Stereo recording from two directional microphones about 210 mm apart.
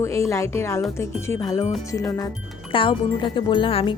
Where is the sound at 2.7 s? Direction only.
25° left (ahead or behind).